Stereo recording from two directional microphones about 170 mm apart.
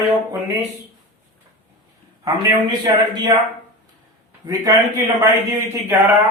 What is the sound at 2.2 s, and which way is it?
Speech, 25° right (ahead or behind).